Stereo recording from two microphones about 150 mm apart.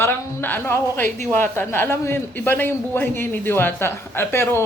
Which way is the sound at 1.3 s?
15° left (ahead or behind).